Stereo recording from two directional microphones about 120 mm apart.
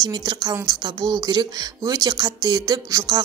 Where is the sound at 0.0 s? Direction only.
35° right (ahead or behind).